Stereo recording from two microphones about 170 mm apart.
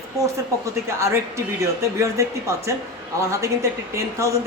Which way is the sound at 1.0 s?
15° right (ahead or behind).